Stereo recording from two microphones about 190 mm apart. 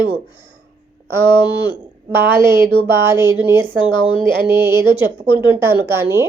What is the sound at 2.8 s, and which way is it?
Speech, 15° right (ahead or behind).